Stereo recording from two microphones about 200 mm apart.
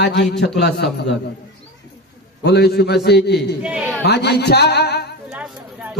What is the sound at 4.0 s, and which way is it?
A man's voice, 55° left (ahead or behind).